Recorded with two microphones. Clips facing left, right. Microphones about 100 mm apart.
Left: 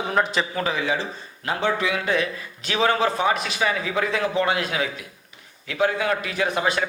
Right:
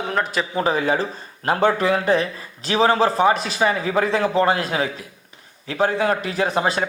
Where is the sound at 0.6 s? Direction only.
40° right (ahead or behind).